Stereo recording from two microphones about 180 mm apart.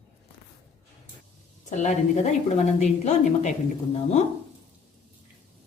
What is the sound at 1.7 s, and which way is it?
A woman's voice, 40° left (ahead or behind).